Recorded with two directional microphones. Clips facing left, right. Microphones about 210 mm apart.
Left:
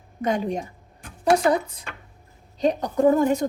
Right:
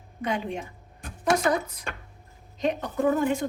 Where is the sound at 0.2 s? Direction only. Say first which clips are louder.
Left 5 dB; 40° left (ahead or behind).